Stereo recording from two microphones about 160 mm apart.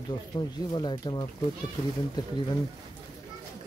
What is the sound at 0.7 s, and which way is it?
Speech, 30° left (ahead or behind).